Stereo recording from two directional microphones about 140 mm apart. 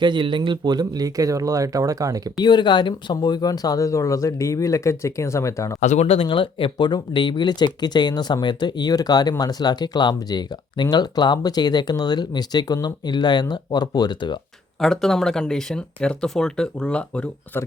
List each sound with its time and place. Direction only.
0.0 s speech: 35° right (ahead or behind)
2.4 s speech: 30° left (ahead or behind)
5.8 s speech: 55° left (ahead or behind)
6.1 s speech: 40° left (ahead or behind)
14.8 s speech: 5° left (ahead or behind)